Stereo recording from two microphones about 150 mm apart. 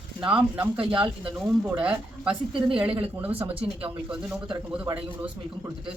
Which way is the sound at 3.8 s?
10° right (ahead or behind).